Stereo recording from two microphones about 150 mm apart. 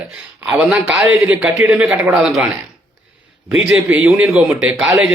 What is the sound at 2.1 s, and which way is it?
Speech, 5° right (ahead or behind).